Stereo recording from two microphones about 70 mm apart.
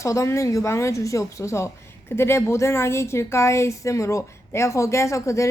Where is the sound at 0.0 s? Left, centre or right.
Left.